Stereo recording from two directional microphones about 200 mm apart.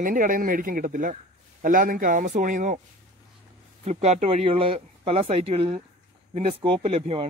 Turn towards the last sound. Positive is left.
turn(degrees=-30)  # may be behind; listen again after turning